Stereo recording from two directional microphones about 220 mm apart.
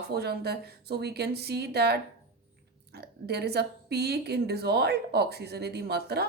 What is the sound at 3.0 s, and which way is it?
Speech, 45° right (ahead or behind).